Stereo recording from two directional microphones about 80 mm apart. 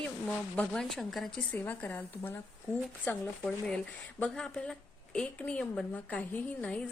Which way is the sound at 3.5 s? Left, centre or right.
Centre.